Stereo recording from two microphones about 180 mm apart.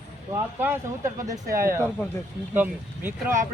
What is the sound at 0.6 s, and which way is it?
Speech, 15° right (ahead or behind).